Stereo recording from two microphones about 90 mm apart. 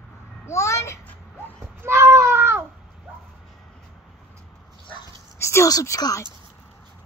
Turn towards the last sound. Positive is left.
turn(degrees=40)  # may be behind; listen again after turning